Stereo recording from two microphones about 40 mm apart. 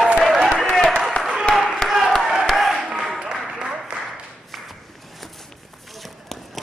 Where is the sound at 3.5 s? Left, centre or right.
Right.